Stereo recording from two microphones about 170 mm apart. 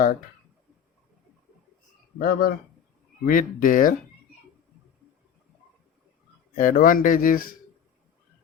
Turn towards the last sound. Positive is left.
turn(degrees=55)  # may be behind; listen again after turning